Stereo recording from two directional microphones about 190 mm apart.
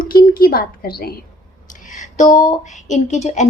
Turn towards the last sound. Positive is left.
turn(degrees=40)  # may be behind; listen again after turning